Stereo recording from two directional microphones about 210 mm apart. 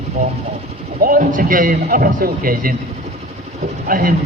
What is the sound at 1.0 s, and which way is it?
Speech, 40° right (ahead or behind).